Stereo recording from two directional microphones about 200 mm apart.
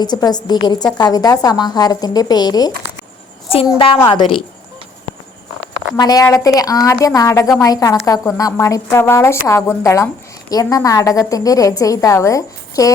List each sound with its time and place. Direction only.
0.0 s speech: 20° left (ahead or behind)
6.0 s a woman's voice: 20° left (ahead or behind)